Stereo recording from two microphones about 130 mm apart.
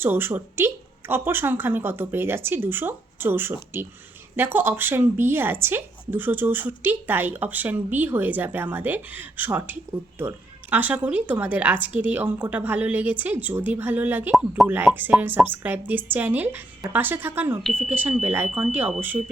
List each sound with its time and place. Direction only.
0.0 s a woman's voice: 15° right (ahead or behind)